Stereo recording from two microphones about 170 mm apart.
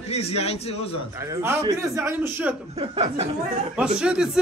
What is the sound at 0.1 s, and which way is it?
Speech, 35° left (ahead or behind).